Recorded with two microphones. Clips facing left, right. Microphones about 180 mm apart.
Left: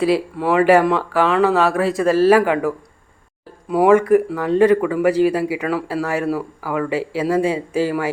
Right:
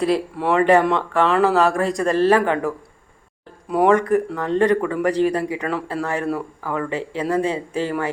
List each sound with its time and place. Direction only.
0.0 s a man's voice: centre (ahead or behind)